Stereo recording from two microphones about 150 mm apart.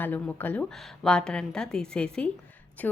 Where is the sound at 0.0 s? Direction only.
10° left (ahead or behind).